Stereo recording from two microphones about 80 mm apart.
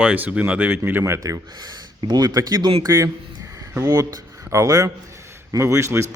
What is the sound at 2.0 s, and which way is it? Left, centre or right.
Speech, right.